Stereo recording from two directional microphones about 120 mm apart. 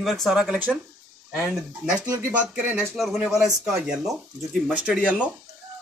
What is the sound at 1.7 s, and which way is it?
Speech, 30° right (ahead or behind).